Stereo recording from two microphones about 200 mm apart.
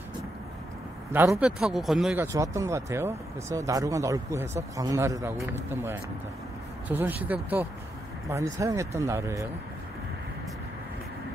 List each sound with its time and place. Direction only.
1.1 s speech: 10° right (ahead or behind)
1.6 s speech: centre (ahead or behind)
2.3 s speech: 15° right (ahead or behind)